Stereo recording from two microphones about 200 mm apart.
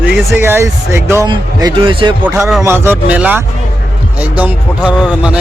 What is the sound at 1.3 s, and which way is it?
Speech, 25° right (ahead or behind).